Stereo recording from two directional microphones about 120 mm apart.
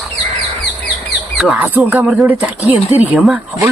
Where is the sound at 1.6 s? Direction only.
15° right (ahead or behind).